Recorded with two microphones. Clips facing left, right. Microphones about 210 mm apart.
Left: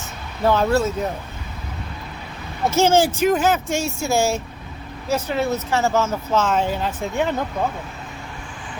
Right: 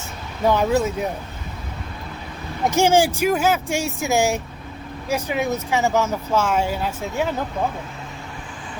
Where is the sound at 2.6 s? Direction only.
15° right (ahead or behind).